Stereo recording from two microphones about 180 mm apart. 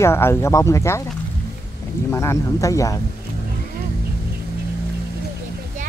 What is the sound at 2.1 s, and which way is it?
Speech, 15° left (ahead or behind).